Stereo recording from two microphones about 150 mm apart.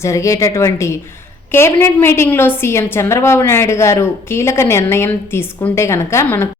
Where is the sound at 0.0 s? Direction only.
20° left (ahead or behind).